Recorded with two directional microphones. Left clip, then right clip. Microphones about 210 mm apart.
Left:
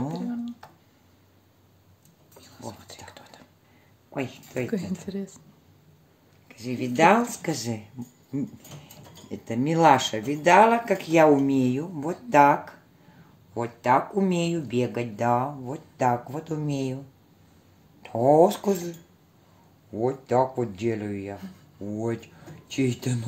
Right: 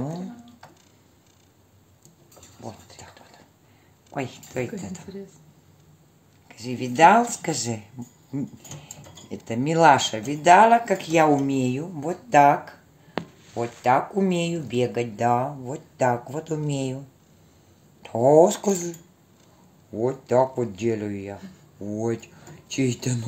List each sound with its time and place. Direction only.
4.1 s speech: 5° right (ahead or behind)
6.5 s speech: 5° right (ahead or behind)
9.3 s speech: 5° right (ahead or behind)
18.0 s speech: 10° right (ahead or behind)
20.0 s speech: 5° right (ahead or behind)